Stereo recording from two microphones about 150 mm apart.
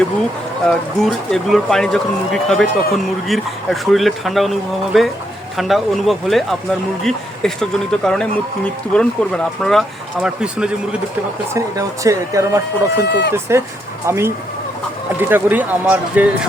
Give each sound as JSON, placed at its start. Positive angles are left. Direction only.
{"t": 0.6, "sound": "speech", "side_deg": 0}
{"t": 11.5, "sound": "speech", "side_deg": -20}